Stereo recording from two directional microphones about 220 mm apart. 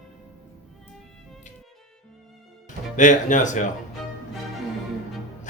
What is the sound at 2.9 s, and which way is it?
Speech, 35° left (ahead or behind).